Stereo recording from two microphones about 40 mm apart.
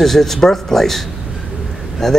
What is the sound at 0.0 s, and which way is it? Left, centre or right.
Speech, centre.